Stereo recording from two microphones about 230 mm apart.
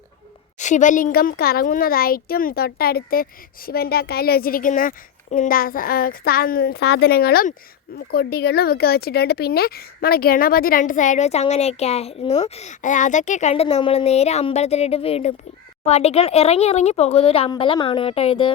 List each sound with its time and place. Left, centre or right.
0.6 s speech: left